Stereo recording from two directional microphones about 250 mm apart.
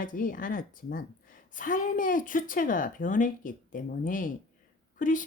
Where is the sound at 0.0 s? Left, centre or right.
Left.